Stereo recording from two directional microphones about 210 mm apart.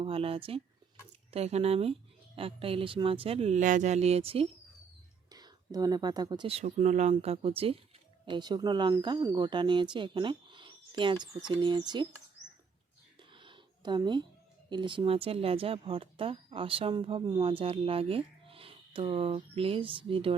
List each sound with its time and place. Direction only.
0.0 s speech: 25° right (ahead or behind)
13.1 s a sound: 25° right (ahead or behind)
14.7 s speech: 20° right (ahead or behind)